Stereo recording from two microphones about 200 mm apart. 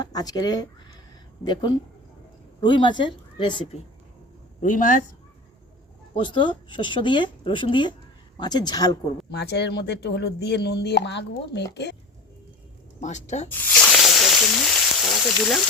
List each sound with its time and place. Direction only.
0.0 s speech: 20° left (ahead or behind)
2.6 s speech: 25° left (ahead or behind)
4.6 s speech: 40° left (ahead or behind)
6.1 s speech: 25° left (ahead or behind)
9.3 s speech: 60° left (ahead or behind)
13.0 s speech: 35° left (ahead or behind)
13.5 s a sound: 10° left (ahead or behind)